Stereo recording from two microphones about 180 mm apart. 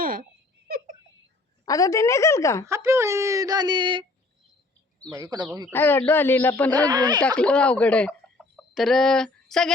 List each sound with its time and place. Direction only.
0.0 s a sound: 50° right (ahead or behind)
1.6 s a woman's voice: 20° left (ahead or behind)
2.6 s speech: 15° right (ahead or behind)
5.1 s speech: 20° right (ahead or behind)
5.7 s a woman's voice: 10° left (ahead or behind)
6.7 s speech: 20° right (ahead or behind)
7.3 s speech: 5° left (ahead or behind)